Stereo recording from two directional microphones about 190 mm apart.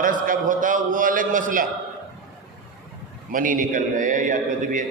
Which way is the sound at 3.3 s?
45° right (ahead or behind).